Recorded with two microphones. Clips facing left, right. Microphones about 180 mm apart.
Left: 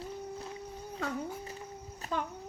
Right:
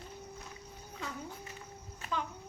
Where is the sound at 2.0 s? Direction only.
50° left (ahead or behind).